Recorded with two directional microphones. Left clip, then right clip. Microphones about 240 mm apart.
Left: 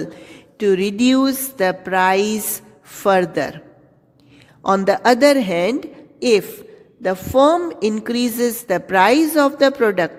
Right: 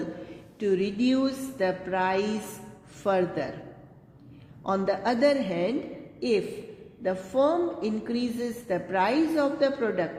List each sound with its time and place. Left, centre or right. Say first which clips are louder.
0.6 s a woman's voice: left 9 dB; left
4.6 s a woman's voice: left 11 dB; left